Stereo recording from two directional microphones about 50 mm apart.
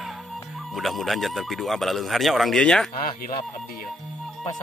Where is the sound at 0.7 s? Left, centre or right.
Centre.